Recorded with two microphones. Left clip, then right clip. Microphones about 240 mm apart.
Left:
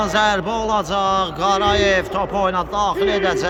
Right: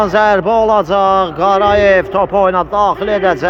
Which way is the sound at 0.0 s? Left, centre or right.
Centre.